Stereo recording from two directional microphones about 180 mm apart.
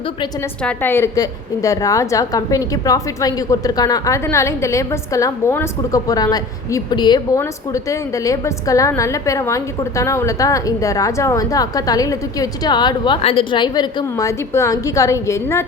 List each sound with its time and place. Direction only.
0.6 s a woman's voice: 10° left (ahead or behind)